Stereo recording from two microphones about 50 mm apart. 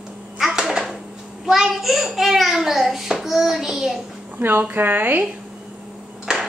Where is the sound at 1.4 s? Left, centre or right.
Centre.